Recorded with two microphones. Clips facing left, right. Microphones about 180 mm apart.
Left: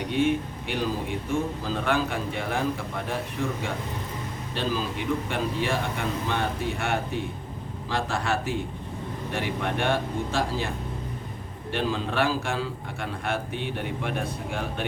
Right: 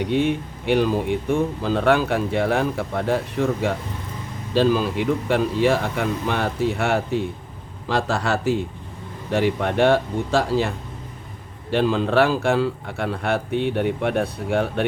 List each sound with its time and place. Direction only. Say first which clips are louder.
0.0 s speech: right 3 dB; 60° right (ahead or behind)
11.7 s speech: right 9 dB; 65° right (ahead or behind)